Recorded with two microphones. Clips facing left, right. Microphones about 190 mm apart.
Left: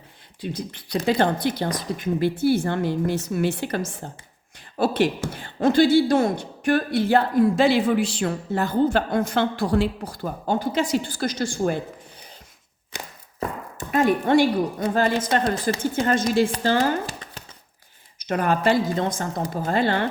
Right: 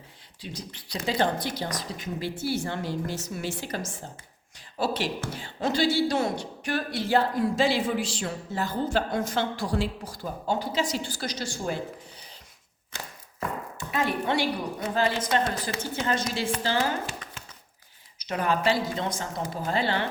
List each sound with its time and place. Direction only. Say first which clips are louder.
0.4 s speech: left 8 dB; 55° left (ahead or behind)
12.9 s a sound: left 3 dB; 15° left (ahead or behind)
13.7 s a woman's voice: left 9 dB; 50° left (ahead or behind)
15.4 s a woman's voice: left 7 dB; 40° left (ahead or behind)
15.8 s speech: left 5 dB; 50° left (ahead or behind)
16.6 s a sound: left 6 dB; 45° left (ahead or behind)
18.2 s speech: left 4 dB; 50° left (ahead or behind)